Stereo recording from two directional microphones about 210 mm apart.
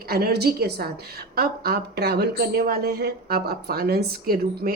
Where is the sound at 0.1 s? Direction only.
50° right (ahead or behind).